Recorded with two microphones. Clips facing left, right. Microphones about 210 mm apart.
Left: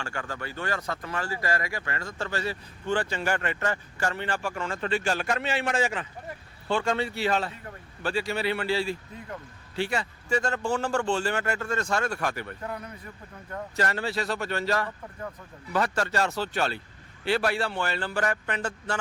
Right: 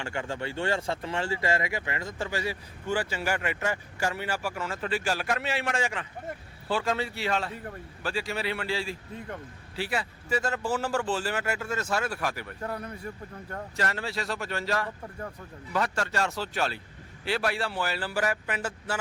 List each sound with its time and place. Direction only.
0.0 s speech: 25° right (ahead or behind); by 12.5 s 5° right (ahead or behind)
12.6 s speech: 30° right (ahead or behind)
13.7 s speech: centre (ahead or behind)
16.1 s speech: centre (ahead or behind)